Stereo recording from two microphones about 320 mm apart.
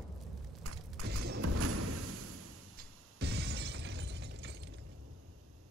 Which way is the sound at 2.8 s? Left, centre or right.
Right.